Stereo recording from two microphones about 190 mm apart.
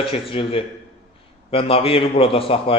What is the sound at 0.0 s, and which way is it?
A man's voice, 30° left (ahead or behind).